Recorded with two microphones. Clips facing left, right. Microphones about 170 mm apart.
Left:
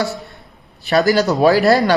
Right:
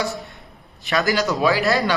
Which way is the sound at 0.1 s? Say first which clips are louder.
Left 2 dB; 35° left (ahead or behind).